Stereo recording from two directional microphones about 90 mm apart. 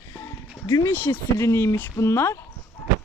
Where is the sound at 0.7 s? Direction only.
45° left (ahead or behind).